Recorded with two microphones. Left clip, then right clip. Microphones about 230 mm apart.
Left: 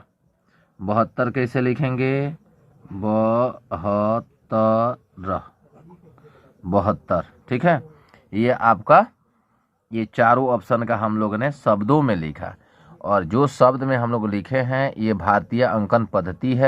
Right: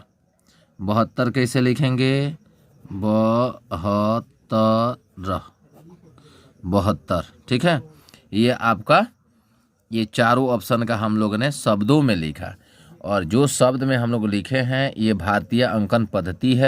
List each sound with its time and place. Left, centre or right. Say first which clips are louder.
0.8 s a man's voice: left 1 dB; right